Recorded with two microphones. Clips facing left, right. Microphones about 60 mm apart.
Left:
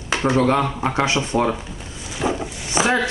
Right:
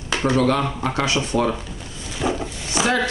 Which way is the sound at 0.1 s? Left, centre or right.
Left.